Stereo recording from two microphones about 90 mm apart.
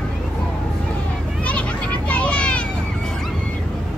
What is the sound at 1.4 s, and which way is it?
Children playing, 15° left (ahead or behind).